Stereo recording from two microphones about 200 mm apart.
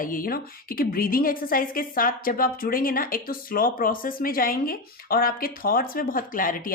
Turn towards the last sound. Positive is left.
turn(degrees=45)  # may be behind; listen again after turning